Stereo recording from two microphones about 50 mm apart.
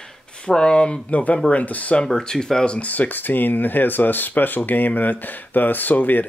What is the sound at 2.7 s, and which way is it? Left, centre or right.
Speech, left.